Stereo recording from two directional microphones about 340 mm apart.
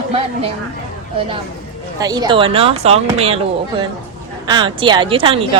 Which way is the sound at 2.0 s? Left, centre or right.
Centre.